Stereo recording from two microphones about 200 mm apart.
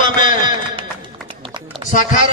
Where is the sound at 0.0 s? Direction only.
40° left (ahead or behind).